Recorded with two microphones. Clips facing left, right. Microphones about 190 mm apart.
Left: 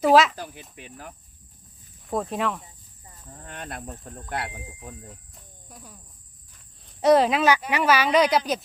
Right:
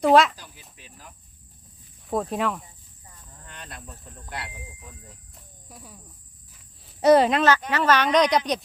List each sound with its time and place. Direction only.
0.0 s speech: centre (ahead or behind)
0.3 s speech: 60° left (ahead or behind)
2.0 s speech: centre (ahead or behind)
3.3 s insect: 55° left (ahead or behind)
5.3 s cricket: centre (ahead or behind)
6.5 s speech: centre (ahead or behind)